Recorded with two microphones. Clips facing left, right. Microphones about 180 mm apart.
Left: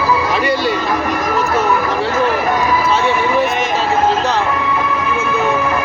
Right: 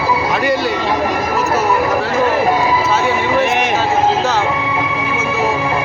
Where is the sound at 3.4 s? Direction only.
75° right (ahead or behind).